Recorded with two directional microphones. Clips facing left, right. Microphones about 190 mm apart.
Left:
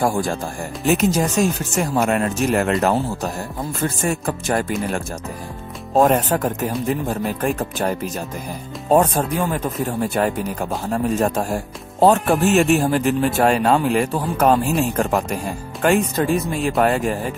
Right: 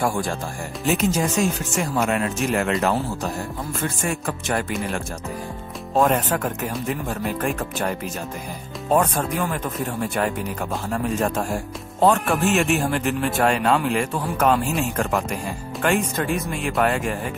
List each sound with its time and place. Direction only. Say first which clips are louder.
0.0 s speech: left 3 dB; 40° left (ahead or behind)
8.9 s speech: left 4 dB; 35° left (ahead or behind)